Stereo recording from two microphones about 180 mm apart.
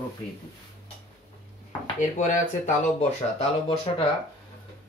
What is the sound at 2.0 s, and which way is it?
Speech, 45° left (ahead or behind).